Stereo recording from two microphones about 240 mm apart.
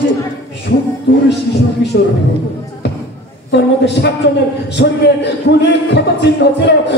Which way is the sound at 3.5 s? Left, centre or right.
Left.